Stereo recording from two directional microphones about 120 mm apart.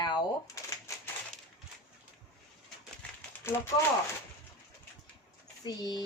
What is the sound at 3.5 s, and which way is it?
Speech, 20° left (ahead or behind).